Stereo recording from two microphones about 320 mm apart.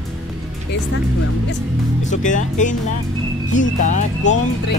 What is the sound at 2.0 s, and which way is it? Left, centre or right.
Speech, left.